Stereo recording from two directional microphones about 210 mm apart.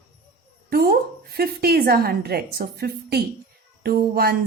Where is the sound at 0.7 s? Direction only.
45° right (ahead or behind).